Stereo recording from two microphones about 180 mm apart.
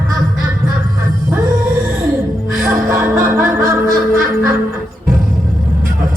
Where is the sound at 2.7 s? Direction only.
15° right (ahead or behind).